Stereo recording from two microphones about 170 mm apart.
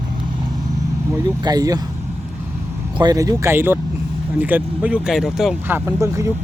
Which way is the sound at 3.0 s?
20° right (ahead or behind).